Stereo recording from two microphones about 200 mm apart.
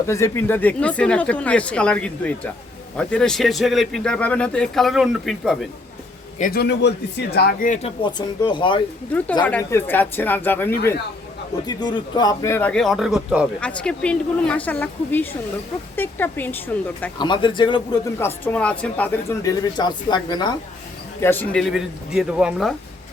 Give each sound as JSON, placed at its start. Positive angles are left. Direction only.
{"t": 0.1, "sound": "speech", "side_deg": 10}
{"t": 6.4, "sound": "speech", "side_deg": 50}
{"t": 9.4, "sound": "speech", "side_deg": 10}
{"t": 11.6, "sound": "speech", "side_deg": 20}
{"t": 17.2, "sound": "speech", "side_deg": 25}
{"t": 18.2, "sound": "speech", "side_deg": 10}
{"t": 21.2, "sound": "speech", "side_deg": 10}